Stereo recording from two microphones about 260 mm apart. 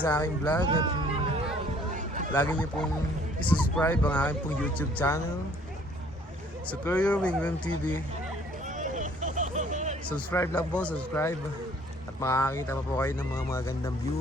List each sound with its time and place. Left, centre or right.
0.0 s speech: centre
0.6 s speech: centre
2.3 s speech: centre
6.7 s speech: centre
8.6 s hubbub: right
10.1 s speech: centre